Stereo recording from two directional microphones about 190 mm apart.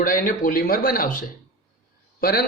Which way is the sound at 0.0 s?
45° left (ahead or behind).